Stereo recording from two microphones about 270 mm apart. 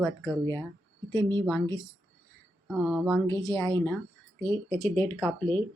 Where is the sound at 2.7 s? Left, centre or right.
Centre.